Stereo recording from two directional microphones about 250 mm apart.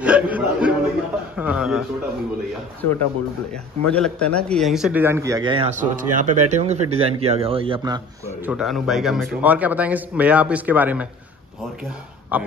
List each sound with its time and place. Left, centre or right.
0.0 s a sound: centre
1.3 s a man's voice: centre
3.8 s a man's voice: centre
8.5 s a man's voice: centre
12.3 s a man's voice: centre